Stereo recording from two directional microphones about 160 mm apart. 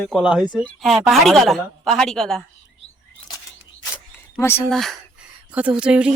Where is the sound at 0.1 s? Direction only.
5° right (ahead or behind).